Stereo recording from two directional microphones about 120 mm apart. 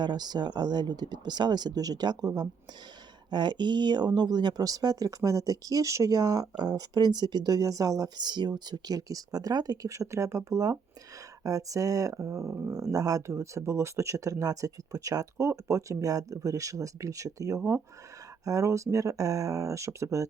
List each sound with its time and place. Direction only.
0.0 s speech: 35° right (ahead or behind)
17.6 s speech: 15° right (ahead or behind)
18.4 s speech: 25° right (ahead or behind)